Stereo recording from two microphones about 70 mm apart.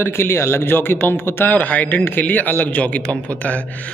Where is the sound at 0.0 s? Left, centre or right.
Left.